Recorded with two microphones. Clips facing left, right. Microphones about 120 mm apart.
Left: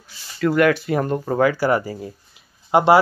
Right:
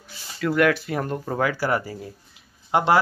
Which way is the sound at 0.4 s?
Centre (ahead or behind).